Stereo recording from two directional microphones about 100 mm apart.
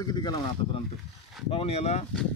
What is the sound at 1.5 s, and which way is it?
Speech, 80° left.